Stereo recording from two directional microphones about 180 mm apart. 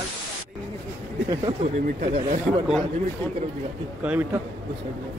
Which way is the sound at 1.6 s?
40° right (ahead or behind).